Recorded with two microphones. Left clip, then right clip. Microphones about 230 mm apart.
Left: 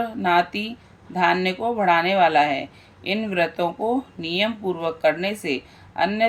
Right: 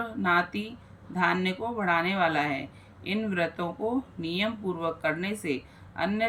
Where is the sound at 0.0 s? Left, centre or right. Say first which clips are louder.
Left 6 dB; centre.